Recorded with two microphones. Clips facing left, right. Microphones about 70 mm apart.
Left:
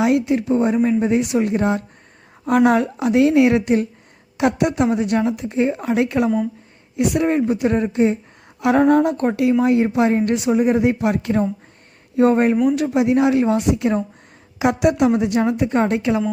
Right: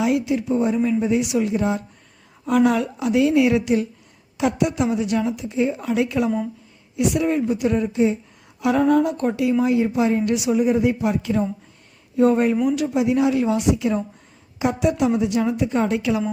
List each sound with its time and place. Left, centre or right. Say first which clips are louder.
0.0 s a woman's voice: left 3 dB; left
12.9 s a woman's voice: left 3 dB; left
14.6 s a woman's voice: left 4 dB; left